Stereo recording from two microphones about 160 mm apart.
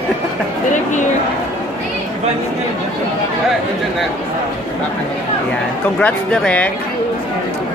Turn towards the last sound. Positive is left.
turn(degrees=5)  # may be behind; listen again after turning